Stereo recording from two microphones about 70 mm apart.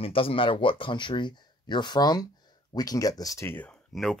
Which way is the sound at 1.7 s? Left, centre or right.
Left.